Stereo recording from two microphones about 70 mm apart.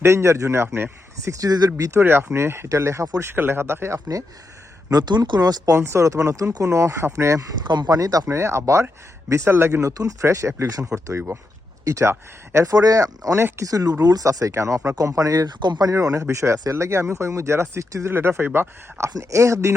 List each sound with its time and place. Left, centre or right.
0.0 s speech: right
2.0 s speech: right
3.2 s speech: right
4.9 s speech: right
5.7 s speech: right
7.6 s speech: right
7.9 s speech: right
8.3 s speech: right
10.0 s speech: right
12.6 s speech: right
15.4 s speech: right
15.9 s speech: right